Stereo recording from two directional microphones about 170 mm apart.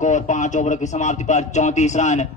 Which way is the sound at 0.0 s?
45° left (ahead or behind).